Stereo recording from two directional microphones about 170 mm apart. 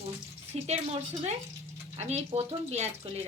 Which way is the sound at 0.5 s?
40° right (ahead or behind).